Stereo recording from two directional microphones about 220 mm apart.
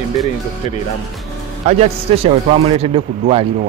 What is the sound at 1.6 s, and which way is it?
A man's voice, 30° right (ahead or behind).